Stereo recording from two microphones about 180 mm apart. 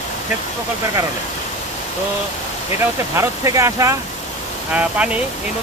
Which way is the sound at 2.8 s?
15° right (ahead or behind).